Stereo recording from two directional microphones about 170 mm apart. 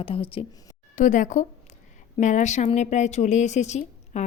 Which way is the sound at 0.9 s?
50° left (ahead or behind).